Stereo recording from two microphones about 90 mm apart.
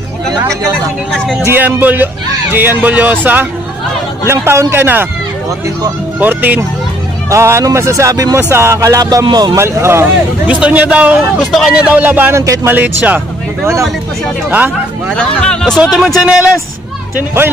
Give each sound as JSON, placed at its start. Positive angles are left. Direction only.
{"t": 1.1, "sound": "speech", "side_deg": 5}
{"t": 1.4, "sound": "speech", "side_deg": -25}
{"t": 6.1, "sound": "speech", "side_deg": -20}
{"t": 7.2, "sound": "speech", "side_deg": -30}
{"t": 9.6, "sound": "speech", "side_deg": -30}
{"t": 10.4, "sound": "a man's voice", "side_deg": -15}
{"t": 15.0, "sound": "speech", "side_deg": 10}
{"t": 16.2, "sound": "speech", "side_deg": -10}
{"t": 17.4, "sound": "speech", "side_deg": -25}